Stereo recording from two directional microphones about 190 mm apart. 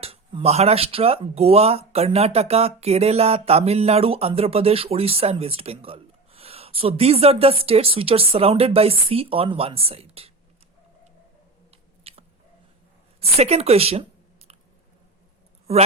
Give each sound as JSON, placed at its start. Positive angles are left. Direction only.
{"t": 0.0, "sound": "speech", "side_deg": -30}
{"t": 11.7, "sound": "chewing", "side_deg": -30}
{"t": 13.1, "sound": "speech", "side_deg": -35}